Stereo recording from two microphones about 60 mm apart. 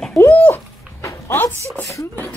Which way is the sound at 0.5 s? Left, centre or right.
Left.